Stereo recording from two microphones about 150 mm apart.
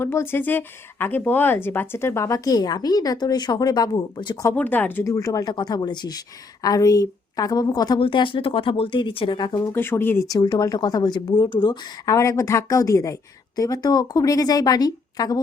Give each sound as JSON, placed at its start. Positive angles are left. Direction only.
{"t": 0.0, "sound": "speech", "side_deg": 15}
{"t": 4.4, "sound": "speech", "side_deg": 10}
{"t": 9.7, "sound": "speech", "side_deg": 15}